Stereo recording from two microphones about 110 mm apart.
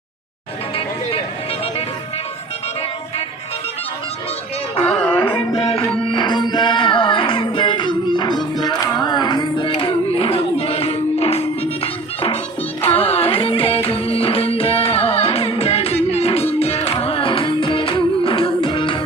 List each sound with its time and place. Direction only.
4.9 s music: 10° left (ahead or behind)
5.5 s music: 60° left (ahead or behind)
6.1 s music: 45° left (ahead or behind)